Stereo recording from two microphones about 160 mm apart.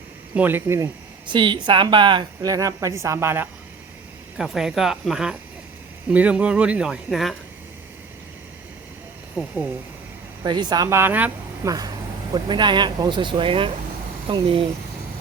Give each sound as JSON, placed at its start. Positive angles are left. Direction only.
{"t": 0.3, "sound": "speech", "side_deg": -15}
{"t": 1.3, "sound": "a woman's voice", "side_deg": -30}
{"t": 4.4, "sound": "speech", "side_deg": 0}
{"t": 9.3, "sound": "speech", "side_deg": -5}
{"t": 10.4, "sound": "a woman's voice", "side_deg": -25}
{"t": 12.3, "sound": "a woman's voice", "side_deg": -30}